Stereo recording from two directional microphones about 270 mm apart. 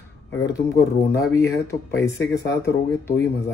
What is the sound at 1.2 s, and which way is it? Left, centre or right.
Speech, centre.